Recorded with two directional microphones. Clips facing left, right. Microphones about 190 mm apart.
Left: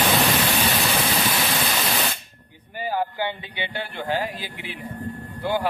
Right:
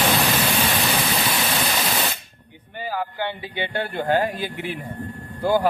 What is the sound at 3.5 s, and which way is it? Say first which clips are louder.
A man's voice: right 5 dB; 50° right (ahead or behind).